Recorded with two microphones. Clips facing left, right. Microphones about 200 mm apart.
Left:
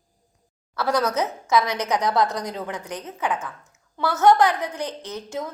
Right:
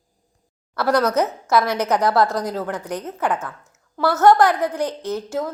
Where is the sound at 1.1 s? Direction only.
10° right (ahead or behind).